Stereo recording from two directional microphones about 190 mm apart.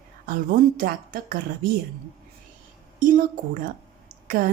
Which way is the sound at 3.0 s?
45° right (ahead or behind).